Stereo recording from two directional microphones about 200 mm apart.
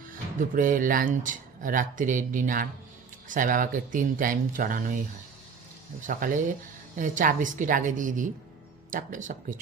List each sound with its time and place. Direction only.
0.1 s speech: 40° right (ahead or behind)
6.1 s speech: 40° right (ahead or behind)